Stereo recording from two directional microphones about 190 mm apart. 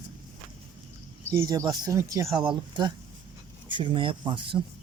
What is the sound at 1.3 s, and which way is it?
Speech, 20° right (ahead or behind).